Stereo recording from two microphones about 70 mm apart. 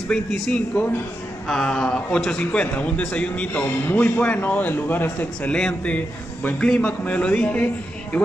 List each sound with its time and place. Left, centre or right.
0.1 s a man's voice: centre
5.5 s a man's voice: centre